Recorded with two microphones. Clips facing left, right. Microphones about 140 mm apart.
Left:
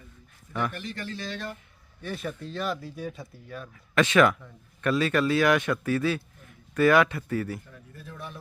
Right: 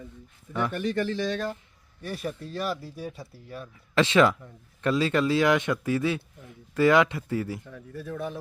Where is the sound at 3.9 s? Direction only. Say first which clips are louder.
Even; 25° right (ahead or behind).